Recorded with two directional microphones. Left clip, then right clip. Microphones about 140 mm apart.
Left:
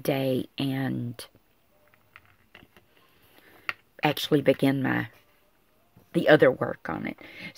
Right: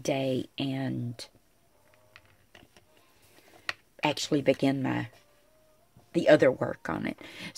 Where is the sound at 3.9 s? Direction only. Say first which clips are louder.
Left 4 dB; 35° left (ahead or behind).